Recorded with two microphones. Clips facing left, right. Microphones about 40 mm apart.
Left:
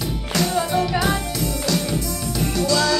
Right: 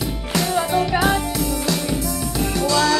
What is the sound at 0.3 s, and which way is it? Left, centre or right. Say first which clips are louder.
Music: right 1 dB; centre.